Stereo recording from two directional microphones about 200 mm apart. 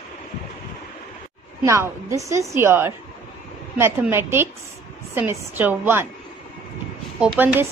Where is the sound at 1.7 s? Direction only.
15° right (ahead or behind).